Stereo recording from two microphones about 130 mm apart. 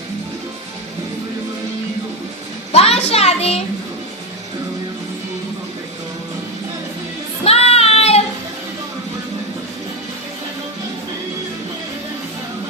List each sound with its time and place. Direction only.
2.7 s a child's voice: 50° left (ahead or behind)
7.4 s child singing: 50° left (ahead or behind)